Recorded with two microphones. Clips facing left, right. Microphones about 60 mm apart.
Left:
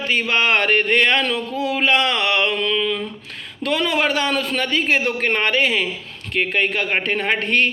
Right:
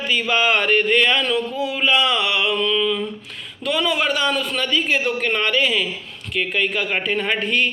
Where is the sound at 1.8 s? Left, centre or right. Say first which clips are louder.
Even; left.